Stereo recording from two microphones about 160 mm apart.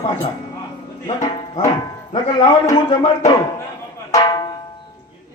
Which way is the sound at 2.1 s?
30° left (ahead or behind).